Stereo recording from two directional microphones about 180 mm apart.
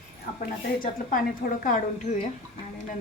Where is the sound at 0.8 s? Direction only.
50° left (ahead or behind).